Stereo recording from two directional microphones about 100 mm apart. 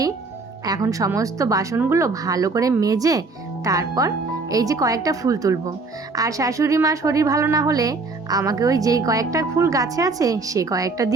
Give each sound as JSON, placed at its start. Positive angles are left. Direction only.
{"t": 0.6, "sound": "a woman's voice", "side_deg": -40}